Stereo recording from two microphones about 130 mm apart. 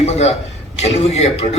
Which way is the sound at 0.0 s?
55° left (ahead or behind).